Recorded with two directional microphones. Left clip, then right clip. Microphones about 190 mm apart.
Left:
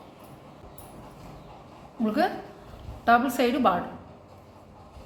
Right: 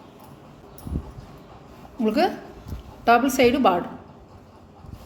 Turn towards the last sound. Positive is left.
turn(degrees=-40)  # may be behind; listen again after turning